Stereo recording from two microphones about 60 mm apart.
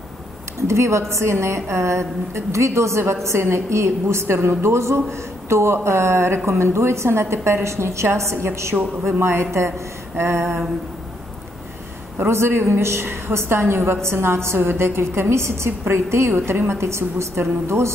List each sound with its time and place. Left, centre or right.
0.6 s a woman's voice: right
12.2 s a woman's voice: right